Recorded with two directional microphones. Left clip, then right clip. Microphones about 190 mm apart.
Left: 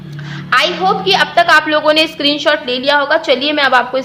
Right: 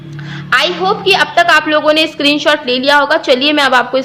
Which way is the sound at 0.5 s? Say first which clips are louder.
Even; 20° right (ahead or behind).